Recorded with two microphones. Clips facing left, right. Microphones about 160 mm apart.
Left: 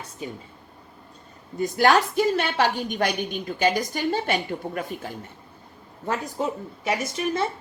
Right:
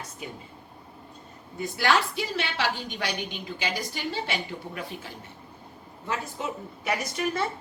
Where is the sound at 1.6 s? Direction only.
45° left (ahead or behind).